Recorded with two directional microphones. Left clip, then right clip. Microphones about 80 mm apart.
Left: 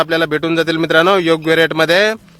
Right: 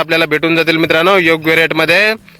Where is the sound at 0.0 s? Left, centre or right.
Right.